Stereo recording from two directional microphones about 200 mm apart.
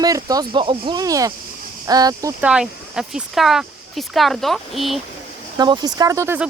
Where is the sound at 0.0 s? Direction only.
20° right (ahead or behind).